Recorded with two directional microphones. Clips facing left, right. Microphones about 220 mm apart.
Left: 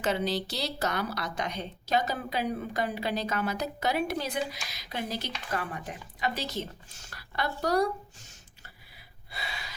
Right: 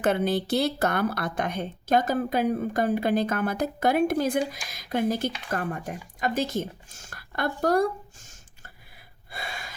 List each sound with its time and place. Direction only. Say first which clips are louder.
0.0 s a woman's voice: right 5 dB; 55° right (ahead or behind)
7.6 s a sound: right 4 dB; 50° right (ahead or behind)
9.3 s gasp: right 3 dB; 50° right (ahead or behind)